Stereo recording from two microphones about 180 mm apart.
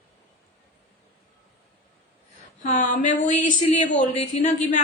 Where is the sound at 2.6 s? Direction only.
40° left (ahead or behind).